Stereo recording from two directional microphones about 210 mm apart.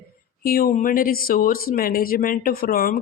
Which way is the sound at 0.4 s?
45° left (ahead or behind).